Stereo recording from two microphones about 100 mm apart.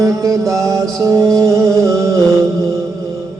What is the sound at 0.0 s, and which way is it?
Music, 35° right (ahead or behind).